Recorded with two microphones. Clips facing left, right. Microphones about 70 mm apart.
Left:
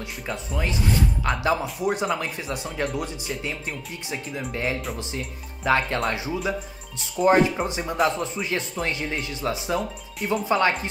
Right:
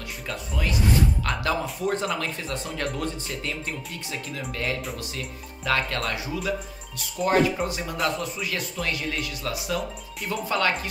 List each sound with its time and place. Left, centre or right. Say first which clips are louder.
0.3 s speech: left 1 dB; left